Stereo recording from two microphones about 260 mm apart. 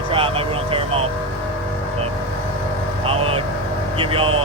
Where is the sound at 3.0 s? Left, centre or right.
Right.